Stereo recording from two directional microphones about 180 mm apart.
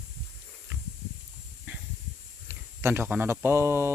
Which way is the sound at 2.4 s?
15° right (ahead or behind).